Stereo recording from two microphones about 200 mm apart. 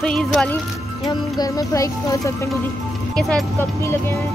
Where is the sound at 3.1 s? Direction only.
Centre (ahead or behind).